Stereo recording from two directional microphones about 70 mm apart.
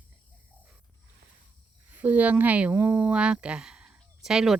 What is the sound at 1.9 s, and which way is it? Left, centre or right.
A woman's voice, right.